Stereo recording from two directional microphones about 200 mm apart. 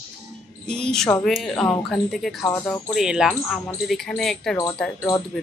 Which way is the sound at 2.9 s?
5° right (ahead or behind).